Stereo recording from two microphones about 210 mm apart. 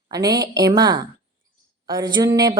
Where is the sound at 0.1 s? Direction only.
15° right (ahead or behind).